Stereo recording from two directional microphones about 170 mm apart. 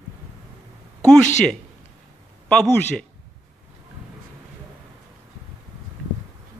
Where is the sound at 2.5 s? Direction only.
5° left (ahead or behind).